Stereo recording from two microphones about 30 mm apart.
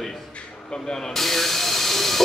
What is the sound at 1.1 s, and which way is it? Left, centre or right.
Speech, centre.